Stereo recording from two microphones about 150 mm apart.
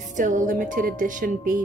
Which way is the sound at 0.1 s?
60° right (ahead or behind).